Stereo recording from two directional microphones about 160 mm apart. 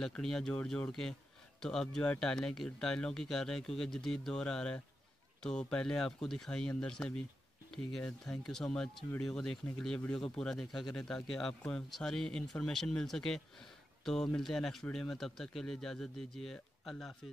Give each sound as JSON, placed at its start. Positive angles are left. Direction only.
{"t": 0.0, "sound": "a man's voice", "side_deg": 5}